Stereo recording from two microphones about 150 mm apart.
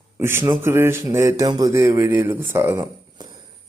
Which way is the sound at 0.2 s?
15° right (ahead or behind).